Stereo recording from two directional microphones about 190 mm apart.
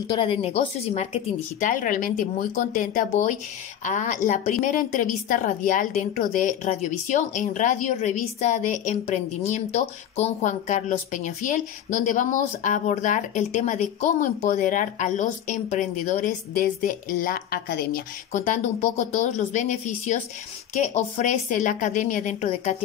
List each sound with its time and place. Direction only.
0.1 s a woman's voice: 30° left (ahead or behind)